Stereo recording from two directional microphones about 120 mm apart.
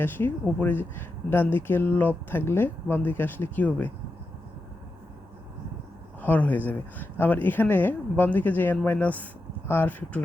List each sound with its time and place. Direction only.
0.4 s speech: 15° left (ahead or behind)
6.2 s speech: 15° left (ahead or behind)